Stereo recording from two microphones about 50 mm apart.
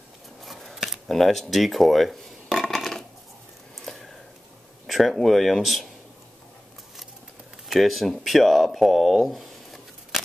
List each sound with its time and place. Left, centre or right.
0.4 s scissors: centre
1.0 s coin: centre
3.8 s a sound: centre
4.8 s speech: centre
7.6 s speech: centre